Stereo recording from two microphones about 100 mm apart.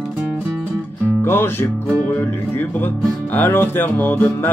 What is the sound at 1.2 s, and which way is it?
Music, 25° left (ahead or behind).